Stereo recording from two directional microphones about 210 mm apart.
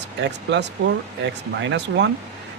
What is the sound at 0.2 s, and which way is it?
Speech, 55° right (ahead or behind).